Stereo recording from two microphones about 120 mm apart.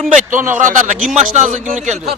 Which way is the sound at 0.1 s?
90° right.